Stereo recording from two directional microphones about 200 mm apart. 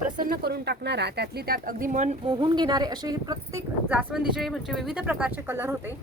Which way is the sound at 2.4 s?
20° right (ahead or behind).